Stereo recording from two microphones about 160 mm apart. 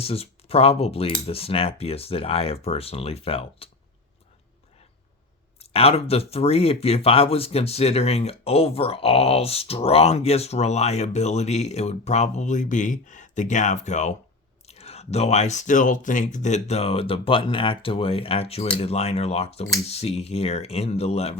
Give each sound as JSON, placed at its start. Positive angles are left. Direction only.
{"t": 0.0, "sound": "speech", "side_deg": 40}
{"t": 5.5, "sound": "speech", "side_deg": 40}